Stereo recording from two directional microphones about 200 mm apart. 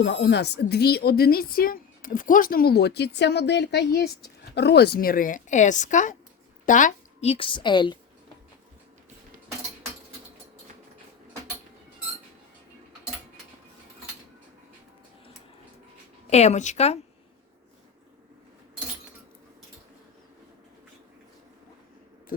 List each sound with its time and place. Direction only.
0.0 s a woman's voice: 60° left (ahead or behind); by 7.9 s 25° left (ahead or behind)
16.3 s a woman's voice: 35° left (ahead or behind)